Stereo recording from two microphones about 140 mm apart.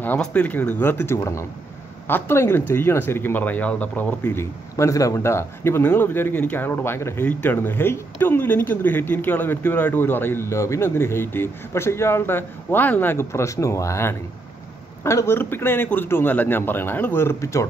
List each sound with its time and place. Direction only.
0.0 s speech: 10° left (ahead or behind)